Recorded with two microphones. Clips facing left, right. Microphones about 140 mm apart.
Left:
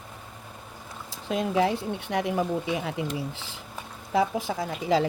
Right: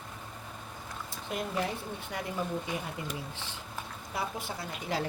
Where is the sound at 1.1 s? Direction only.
90° left.